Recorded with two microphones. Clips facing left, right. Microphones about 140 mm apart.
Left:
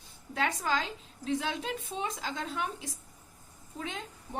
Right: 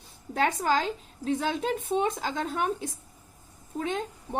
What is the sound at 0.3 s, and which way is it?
A woman's voice, 45° right (ahead or behind).